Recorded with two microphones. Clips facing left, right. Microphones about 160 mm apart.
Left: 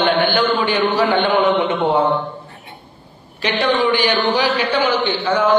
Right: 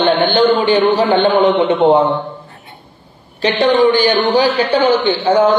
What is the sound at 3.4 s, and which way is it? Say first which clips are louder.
A man's voice: right 6 dB; 35° right (ahead or behind).